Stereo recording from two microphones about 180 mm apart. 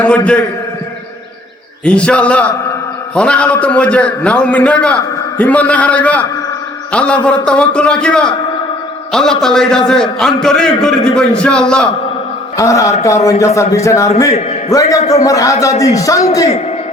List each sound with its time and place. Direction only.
1.8 s a man's voice: 5° left (ahead or behind)
12.5 s a man's voice: 20° left (ahead or behind)